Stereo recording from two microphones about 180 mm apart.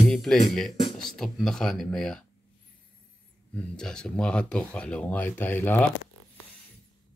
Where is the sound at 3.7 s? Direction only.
5° left (ahead or behind).